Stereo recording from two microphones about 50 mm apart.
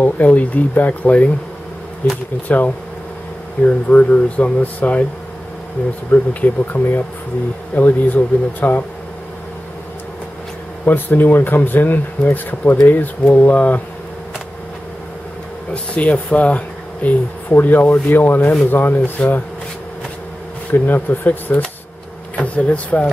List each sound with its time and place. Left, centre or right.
0.0 s speech: left
6.1 s speech: left
10.9 s speech: left
15.7 s speech: left
20.7 s speech: left